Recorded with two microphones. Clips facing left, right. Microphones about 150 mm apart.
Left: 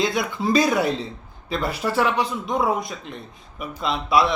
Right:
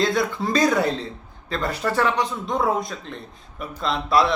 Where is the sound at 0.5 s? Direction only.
10° left (ahead or behind).